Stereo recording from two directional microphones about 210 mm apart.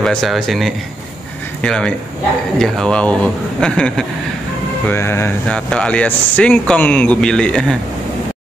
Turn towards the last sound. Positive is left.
turn(degrees=5)  # may be behind; listen again after turning